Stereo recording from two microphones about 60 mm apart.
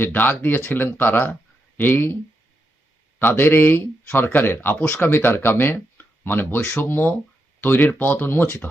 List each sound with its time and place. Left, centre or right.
0.0 s speech: left
3.2 s speech: left